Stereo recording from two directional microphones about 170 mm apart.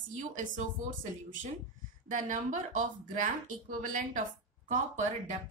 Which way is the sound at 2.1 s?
50° right (ahead or behind).